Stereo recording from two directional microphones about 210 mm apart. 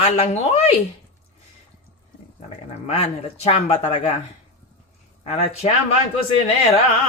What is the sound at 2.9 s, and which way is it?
Speech, 30° left (ahead or behind).